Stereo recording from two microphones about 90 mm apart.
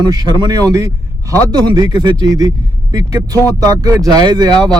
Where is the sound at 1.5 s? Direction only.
55° right (ahead or behind).